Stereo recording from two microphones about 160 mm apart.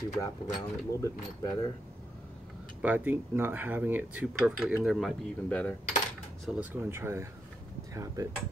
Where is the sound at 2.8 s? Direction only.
10° right (ahead or behind); by 5.8 s 5° left (ahead or behind).